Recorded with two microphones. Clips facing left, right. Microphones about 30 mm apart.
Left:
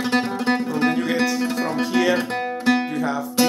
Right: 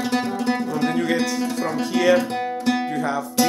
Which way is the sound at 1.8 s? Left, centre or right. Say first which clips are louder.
Right 3 dB; centre.